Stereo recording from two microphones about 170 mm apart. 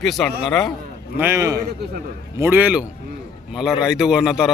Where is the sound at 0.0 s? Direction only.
Centre (ahead or behind).